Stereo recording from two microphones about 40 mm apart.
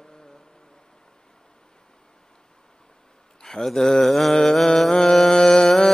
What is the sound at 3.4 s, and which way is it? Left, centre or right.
Mantra, centre.